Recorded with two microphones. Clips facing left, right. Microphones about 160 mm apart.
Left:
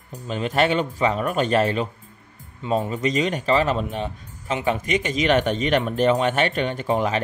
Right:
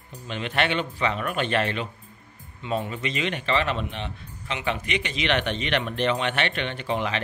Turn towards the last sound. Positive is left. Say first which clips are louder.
# left 5 dB
turn(degrees=45)  # may be behind; listen again after turning